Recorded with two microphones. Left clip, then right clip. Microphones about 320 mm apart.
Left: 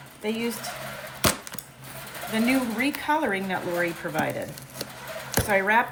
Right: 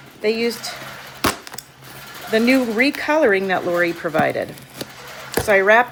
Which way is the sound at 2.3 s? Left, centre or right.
Centre.